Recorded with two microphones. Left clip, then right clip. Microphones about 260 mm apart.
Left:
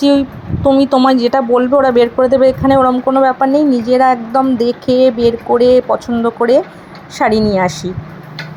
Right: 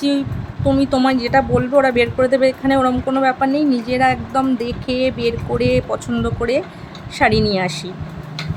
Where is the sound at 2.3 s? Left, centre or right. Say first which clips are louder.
Left 6 dB; centre.